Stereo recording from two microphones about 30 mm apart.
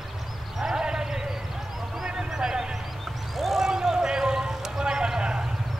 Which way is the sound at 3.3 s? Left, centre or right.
Centre.